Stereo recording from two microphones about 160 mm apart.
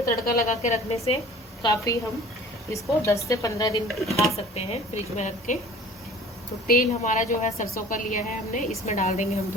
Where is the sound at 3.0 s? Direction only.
20° left (ahead or behind).